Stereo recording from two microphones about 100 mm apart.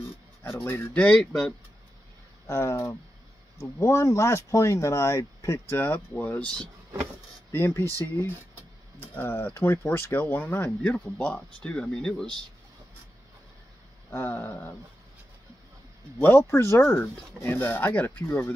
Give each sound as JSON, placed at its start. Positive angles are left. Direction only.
{"t": 0.7, "sound": "speech", "side_deg": 20}
{"t": 2.4, "sound": "speech", "side_deg": 25}
{"t": 7.5, "sound": "speech", "side_deg": 25}
{"t": 7.8, "sound": "speech", "side_deg": -35}
{"t": 9.1, "sound": "speech", "side_deg": 20}
{"t": 14.1, "sound": "speech", "side_deg": 20}
{"t": 16.2, "sound": "speech", "side_deg": 20}